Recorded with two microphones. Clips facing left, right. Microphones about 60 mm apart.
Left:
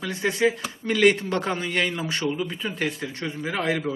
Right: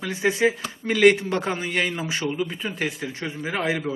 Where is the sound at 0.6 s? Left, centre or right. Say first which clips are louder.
Right 4 dB; centre.